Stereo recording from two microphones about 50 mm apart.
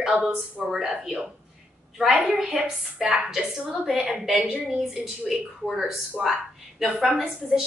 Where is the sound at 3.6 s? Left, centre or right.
Centre.